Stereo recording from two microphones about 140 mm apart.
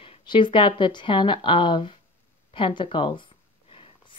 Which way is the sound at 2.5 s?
40° left (ahead or behind).